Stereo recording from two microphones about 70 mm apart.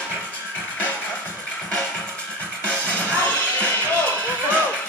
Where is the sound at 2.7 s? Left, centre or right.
Left.